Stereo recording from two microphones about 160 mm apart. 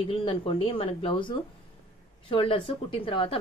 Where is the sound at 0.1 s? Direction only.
35° left (ahead or behind).